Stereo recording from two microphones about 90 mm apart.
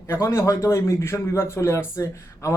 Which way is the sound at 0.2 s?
35° left (ahead or behind).